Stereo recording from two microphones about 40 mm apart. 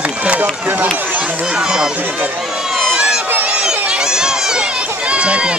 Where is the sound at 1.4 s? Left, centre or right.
Centre.